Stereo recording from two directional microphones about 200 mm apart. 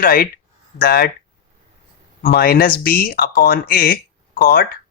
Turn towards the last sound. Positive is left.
turn(degrees=45)  # may be behind; listen again after turning